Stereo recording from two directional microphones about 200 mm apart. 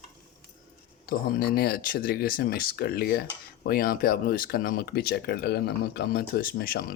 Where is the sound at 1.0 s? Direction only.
45° left (ahead or behind).